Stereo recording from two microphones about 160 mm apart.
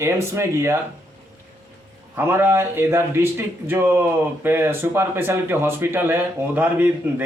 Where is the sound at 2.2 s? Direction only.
15° right (ahead or behind).